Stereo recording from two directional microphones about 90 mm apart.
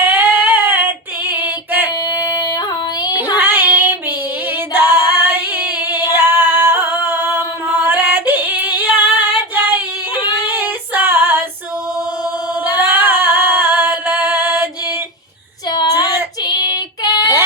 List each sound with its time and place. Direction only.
0.0 s female singing: 20° right (ahead or behind)
2.0 s female singing: 45° left (ahead or behind)
3.3 s child singing: 20° right (ahead or behind)
4.5 s female singing: 25° right (ahead or behind)
5.8 s singing: 20° right (ahead or behind)
10.4 s child singing: 20° right (ahead or behind)
12.7 s female singing: 20° right (ahead or behind)
15.7 s female singing: 45° left (ahead or behind)